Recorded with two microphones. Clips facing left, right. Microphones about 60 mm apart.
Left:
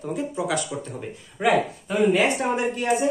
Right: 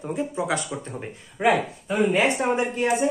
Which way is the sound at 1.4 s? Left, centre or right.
Centre.